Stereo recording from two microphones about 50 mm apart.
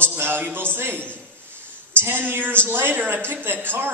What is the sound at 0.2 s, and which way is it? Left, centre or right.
Speech, right.